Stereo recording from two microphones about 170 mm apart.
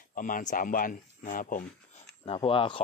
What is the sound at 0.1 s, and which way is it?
Speech, 50° left (ahead or behind).